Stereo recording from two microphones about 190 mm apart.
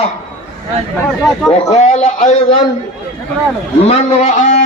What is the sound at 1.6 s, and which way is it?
Speech, 35° left (ahead or behind).